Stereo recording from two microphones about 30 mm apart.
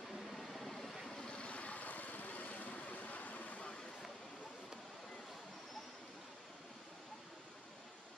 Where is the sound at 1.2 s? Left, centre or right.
Left.